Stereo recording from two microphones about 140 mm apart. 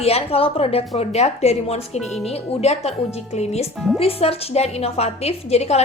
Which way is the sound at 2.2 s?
50° left (ahead or behind).